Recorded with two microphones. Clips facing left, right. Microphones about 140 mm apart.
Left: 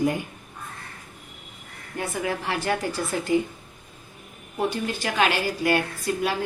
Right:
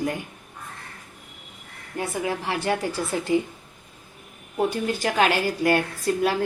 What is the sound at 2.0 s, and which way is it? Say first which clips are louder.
Speech: right 1 dB; 30° right (ahead or behind).